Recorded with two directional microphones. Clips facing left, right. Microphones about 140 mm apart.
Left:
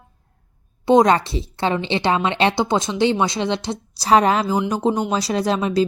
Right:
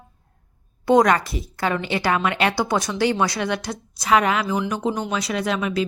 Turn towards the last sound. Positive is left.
turn(degrees=35)  # may be behind; listen again after turning